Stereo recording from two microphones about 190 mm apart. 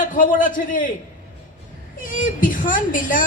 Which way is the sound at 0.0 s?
45° left (ahead or behind).